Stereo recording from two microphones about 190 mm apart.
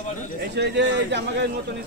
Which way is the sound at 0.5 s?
65° right (ahead or behind).